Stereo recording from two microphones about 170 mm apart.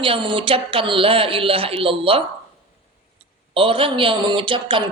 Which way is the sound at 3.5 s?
30° right (ahead or behind).